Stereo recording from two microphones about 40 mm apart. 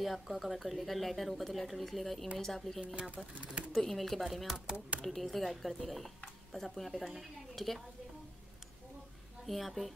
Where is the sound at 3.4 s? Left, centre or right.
Right.